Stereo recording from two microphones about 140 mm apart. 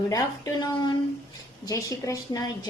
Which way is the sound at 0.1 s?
25° left (ahead or behind).